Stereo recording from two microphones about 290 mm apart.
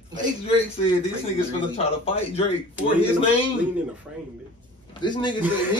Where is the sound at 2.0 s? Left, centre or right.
Left.